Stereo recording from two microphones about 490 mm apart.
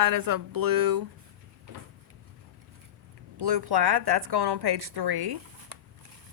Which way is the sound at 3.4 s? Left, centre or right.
Right.